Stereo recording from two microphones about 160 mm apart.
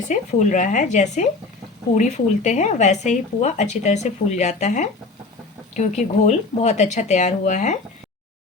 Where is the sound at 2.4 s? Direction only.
50° left (ahead or behind).